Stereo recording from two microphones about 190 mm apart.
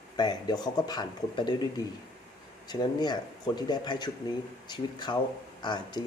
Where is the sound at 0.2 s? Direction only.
20° left (ahead or behind).